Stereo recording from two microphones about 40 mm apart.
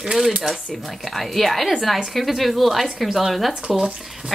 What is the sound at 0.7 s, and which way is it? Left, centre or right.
Speech, centre.